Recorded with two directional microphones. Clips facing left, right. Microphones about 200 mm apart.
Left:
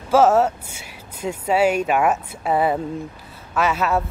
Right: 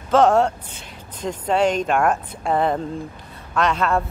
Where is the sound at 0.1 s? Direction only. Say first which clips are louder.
Even; 5° left (ahead or behind).